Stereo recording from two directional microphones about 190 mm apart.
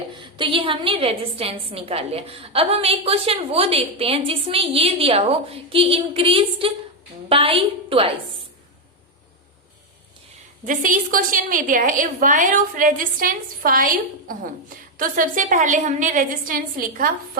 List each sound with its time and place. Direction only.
0.1 s a woman's voice: 25° right (ahead or behind)
10.7 s a woman's voice: 45° right (ahead or behind)